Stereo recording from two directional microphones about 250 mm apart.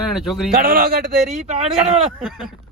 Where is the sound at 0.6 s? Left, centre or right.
Right.